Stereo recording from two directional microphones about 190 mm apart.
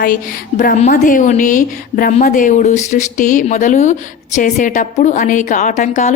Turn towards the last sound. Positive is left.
turn(degrees=40)  # may be behind; listen again after turning